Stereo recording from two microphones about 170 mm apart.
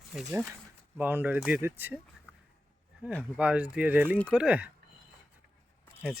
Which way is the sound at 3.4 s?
5° right (ahead or behind).